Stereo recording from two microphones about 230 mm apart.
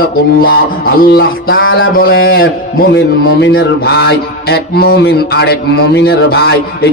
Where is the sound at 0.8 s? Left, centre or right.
Left.